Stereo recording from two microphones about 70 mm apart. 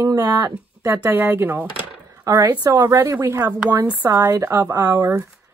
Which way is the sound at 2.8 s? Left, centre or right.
Right.